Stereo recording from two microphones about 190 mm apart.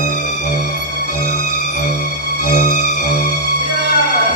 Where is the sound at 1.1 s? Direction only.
45° left (ahead or behind).